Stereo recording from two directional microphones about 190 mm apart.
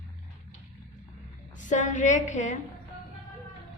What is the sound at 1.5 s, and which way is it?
A woman's voice, 40° left (ahead or behind).